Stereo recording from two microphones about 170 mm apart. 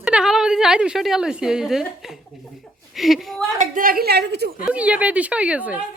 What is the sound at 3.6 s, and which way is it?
Speech, 55° right (ahead or behind).